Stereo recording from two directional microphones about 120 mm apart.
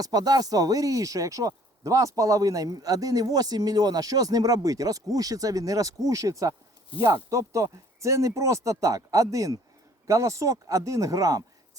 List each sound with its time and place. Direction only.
0.0 s speech: 30° right (ahead or behind)